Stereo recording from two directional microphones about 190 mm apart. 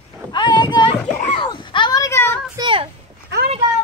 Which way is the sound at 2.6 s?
25° right (ahead or behind).